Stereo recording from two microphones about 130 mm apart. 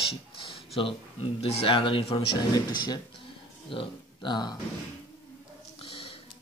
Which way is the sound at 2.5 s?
30° left (ahead or behind).